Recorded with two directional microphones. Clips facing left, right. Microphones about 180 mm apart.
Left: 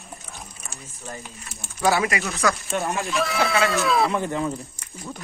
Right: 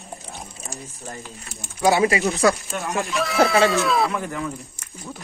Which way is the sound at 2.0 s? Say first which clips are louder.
Right 5 dB; 35° right (ahead or behind).